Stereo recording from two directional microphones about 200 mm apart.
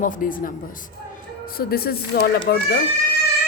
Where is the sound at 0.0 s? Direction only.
45° left (ahead or behind).